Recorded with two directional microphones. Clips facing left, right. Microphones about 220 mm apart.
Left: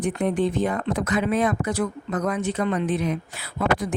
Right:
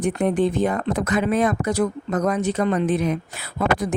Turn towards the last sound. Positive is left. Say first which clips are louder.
# right 2 dB
turn(degrees=-45)  # may be behind; listen again after turning